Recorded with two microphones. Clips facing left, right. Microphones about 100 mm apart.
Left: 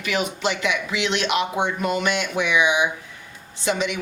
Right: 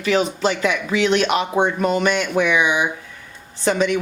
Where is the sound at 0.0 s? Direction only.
35° right (ahead or behind).